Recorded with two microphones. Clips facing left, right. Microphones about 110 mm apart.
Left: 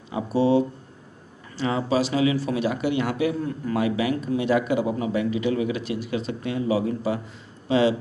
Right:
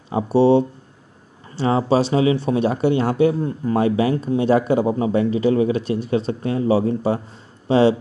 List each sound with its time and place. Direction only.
0.1 s speech: 30° right (ahead or behind)